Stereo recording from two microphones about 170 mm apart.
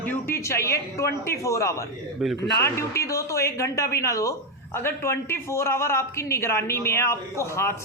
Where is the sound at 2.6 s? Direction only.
15° left (ahead or behind).